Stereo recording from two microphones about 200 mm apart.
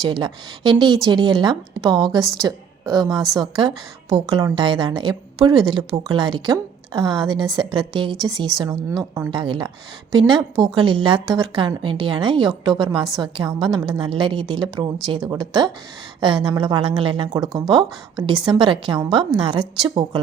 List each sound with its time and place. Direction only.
0.0 s a woman's voice: 25° right (ahead or behind)